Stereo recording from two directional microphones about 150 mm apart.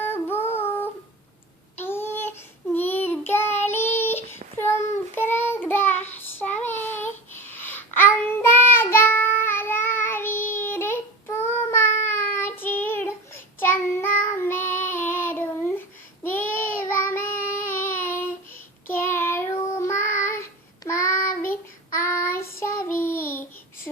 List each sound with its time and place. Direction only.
0.0 s child singing: 15° left (ahead or behind)
1.8 s a sound: 15° left (ahead or behind)
2.7 s child singing: 15° left (ahead or behind)